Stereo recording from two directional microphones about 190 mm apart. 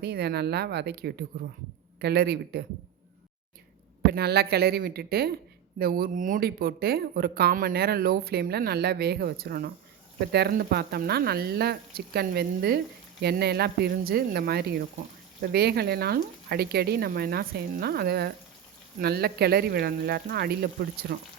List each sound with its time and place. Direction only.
0.0 s speech: 55° right (ahead or behind)
4.1 s speech: 55° right (ahead or behind)